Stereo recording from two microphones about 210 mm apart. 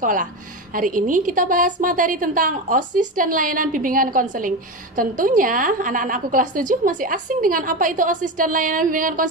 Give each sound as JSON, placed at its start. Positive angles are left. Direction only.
{"t": 0.0, "sound": "a woman's voice", "side_deg": -40}